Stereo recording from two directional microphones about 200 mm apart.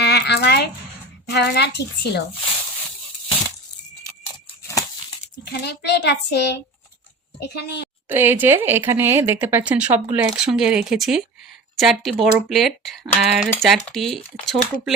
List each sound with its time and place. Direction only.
0.0 s a sound: 55° left (ahead or behind)
1.3 s a child's voice: 55° left (ahead or behind)
5.5 s a child's voice: 55° left (ahead or behind)
8.0 s speech: 10° right (ahead or behind)